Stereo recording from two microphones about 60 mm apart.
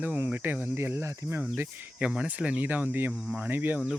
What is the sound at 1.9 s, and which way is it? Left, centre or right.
Speech, right.